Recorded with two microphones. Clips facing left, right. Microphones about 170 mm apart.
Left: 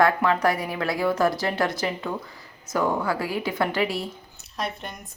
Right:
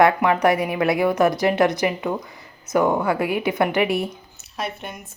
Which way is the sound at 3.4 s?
20° right (ahead or behind).